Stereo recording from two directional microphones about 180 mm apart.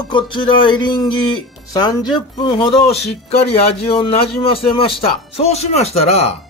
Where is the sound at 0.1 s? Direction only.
25° left (ahead or behind).